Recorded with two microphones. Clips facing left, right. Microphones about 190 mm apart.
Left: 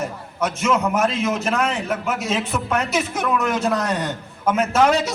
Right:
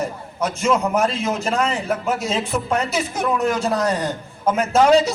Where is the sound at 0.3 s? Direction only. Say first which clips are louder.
Right 1 dB; 35° right (ahead or behind).